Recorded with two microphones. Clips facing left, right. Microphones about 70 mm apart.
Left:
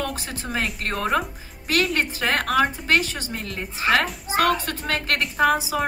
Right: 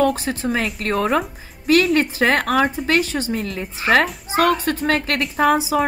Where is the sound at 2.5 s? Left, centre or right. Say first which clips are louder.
Right 2 dB; right.